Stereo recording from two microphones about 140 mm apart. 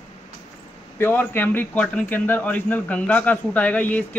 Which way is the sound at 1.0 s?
15° left (ahead or behind).